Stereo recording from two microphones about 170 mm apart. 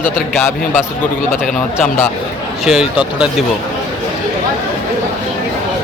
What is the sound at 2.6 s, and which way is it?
Speech, 5° right (ahead or behind).